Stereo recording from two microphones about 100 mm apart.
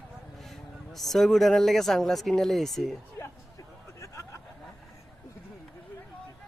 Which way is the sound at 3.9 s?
30° left (ahead or behind).